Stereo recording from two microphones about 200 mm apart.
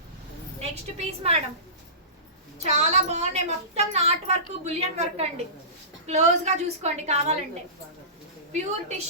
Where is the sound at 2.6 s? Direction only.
35° right (ahead or behind).